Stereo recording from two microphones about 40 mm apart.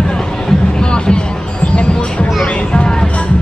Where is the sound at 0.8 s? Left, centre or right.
Left.